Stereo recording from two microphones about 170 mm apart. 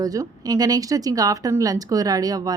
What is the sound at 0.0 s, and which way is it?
A woman's voice, 20° right (ahead or behind).